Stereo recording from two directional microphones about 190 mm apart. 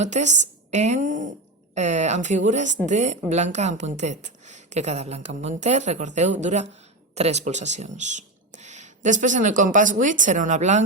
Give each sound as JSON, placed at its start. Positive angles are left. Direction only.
{"t": 0.0, "sound": "a woman's voice", "side_deg": -40}